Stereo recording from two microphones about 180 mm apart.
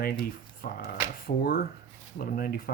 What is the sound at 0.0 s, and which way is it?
Speech, 55° left (ahead or behind).